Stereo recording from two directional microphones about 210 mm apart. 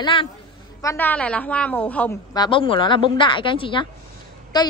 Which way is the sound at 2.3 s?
20° left (ahead or behind).